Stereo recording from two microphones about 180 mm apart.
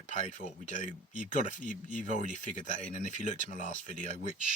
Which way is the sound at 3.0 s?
40° right (ahead or behind).